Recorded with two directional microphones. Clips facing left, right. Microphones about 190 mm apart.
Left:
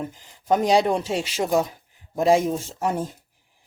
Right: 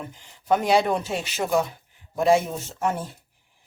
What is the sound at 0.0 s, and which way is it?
Speech, 35° left (ahead or behind).